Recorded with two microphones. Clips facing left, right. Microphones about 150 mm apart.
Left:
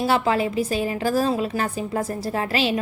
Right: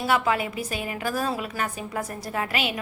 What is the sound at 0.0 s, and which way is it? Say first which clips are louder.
A woman's voice: left 3 dB; 30° left (ahead or behind).